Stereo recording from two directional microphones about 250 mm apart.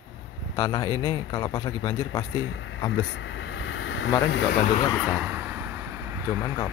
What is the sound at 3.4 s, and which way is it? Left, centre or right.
Vehicle, left.